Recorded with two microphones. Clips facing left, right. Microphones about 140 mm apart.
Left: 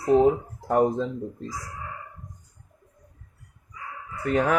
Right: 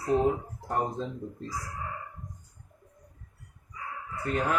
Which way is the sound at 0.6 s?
75° left (ahead or behind).